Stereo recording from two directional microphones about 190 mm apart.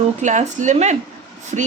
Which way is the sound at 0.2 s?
40° right (ahead or behind).